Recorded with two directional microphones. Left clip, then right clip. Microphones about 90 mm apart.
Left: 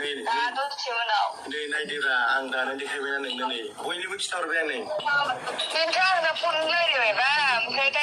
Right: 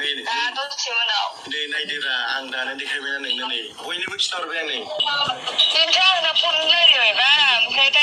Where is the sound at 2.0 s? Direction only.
70° left (ahead or behind).